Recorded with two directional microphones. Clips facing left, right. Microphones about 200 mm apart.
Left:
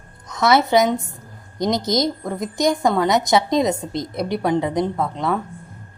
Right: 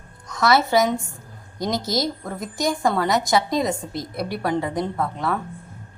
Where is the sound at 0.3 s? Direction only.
20° left (ahead or behind).